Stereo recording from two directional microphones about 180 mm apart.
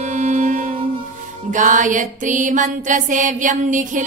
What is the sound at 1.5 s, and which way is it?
Mantra, 45° right (ahead or behind).